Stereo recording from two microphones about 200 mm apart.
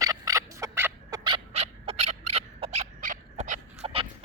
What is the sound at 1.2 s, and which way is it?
Owl, 25° right (ahead or behind).